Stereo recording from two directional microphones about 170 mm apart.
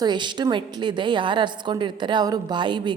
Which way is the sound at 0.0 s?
25° right (ahead or behind).